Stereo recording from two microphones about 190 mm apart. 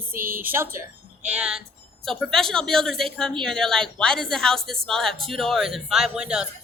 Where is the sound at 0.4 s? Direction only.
10° right (ahead or behind).